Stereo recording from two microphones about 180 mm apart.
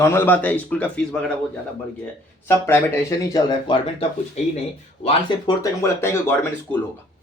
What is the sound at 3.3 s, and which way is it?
Speech, 30° left (ahead or behind).